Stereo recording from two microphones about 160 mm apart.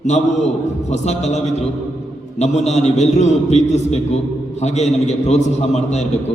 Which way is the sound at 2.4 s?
45° left (ahead or behind).